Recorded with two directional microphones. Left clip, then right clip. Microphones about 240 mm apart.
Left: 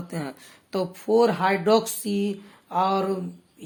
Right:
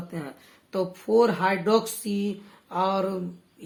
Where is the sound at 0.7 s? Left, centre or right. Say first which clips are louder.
Even; left.